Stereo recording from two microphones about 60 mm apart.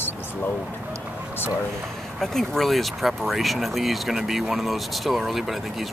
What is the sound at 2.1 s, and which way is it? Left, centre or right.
Speech, centre.